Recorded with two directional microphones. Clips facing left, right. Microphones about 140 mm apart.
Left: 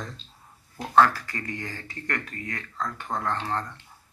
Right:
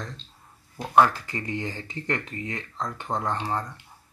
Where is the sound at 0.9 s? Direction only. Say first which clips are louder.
Even; 20° right (ahead or behind).